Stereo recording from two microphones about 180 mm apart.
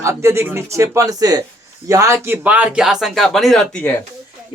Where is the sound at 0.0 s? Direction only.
15° right (ahead or behind); by 4.0 s 10° left (ahead or behind).